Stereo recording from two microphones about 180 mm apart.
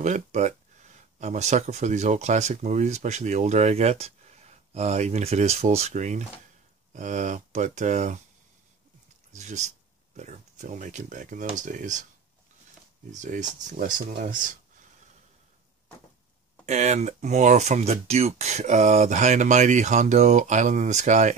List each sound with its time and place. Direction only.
0.0 s speech: 40° right (ahead or behind)
9.3 s speech: 40° right (ahead or behind)
13.1 s speech: 45° right (ahead or behind)
16.6 s speech: 40° right (ahead or behind)